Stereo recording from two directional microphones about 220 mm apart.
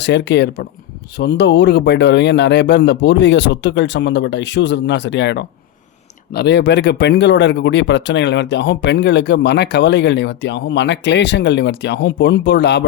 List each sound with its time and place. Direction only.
0.0 s speech: 55° left (ahead or behind)